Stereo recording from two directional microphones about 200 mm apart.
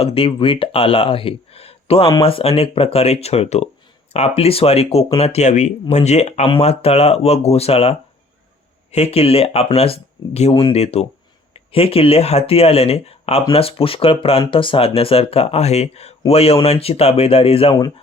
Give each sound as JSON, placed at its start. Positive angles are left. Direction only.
{"t": 0.0, "sound": "speech", "side_deg": 30}